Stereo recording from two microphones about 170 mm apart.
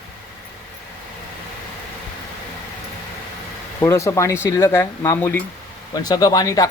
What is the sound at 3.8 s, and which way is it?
Speech, 15° left (ahead or behind).